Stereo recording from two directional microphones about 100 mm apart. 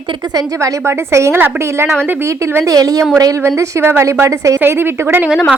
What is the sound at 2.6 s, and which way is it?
Speech, 35° right (ahead or behind).